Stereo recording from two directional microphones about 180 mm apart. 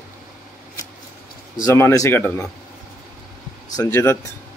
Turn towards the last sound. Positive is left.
turn(degrees=15)  # may be behind; listen again after turning